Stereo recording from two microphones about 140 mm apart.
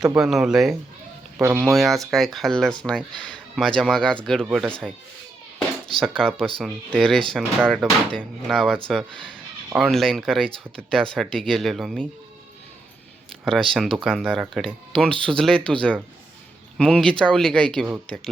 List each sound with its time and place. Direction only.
0.2 s speech: 5° right (ahead or behind)
1.4 s speech: 20° right (ahead or behind)
1.7 s speech: centre (ahead or behind)
4.4 s speech: 10° right (ahead or behind)
4.7 s speech: 5° left (ahead or behind)
6.0 s speech: 5° left (ahead or behind)
13.4 s speech: 5° left (ahead or behind)